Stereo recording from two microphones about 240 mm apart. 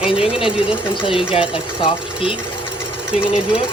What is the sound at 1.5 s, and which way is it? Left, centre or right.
Speech, left.